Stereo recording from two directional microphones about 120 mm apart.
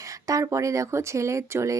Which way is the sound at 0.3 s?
25° right (ahead or behind).